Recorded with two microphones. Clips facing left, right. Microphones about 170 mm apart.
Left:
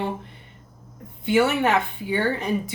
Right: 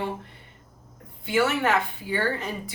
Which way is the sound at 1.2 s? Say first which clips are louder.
Left 3 dB; 20° left (ahead or behind).